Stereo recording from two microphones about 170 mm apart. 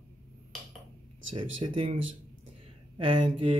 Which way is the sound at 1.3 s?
35° right (ahead or behind).